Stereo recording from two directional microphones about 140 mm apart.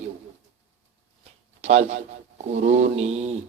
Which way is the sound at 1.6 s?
55° right (ahead or behind).